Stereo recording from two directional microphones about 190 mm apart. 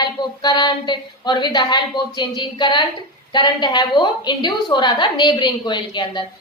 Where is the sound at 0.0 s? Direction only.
20° left (ahead or behind).